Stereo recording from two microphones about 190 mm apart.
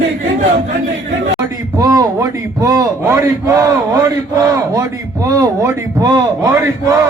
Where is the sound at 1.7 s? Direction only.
20° right (ahead or behind).